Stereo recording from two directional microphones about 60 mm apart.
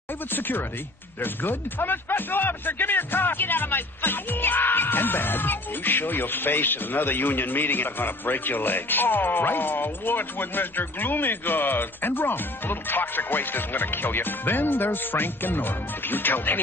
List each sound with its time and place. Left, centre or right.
0.3 s speech: left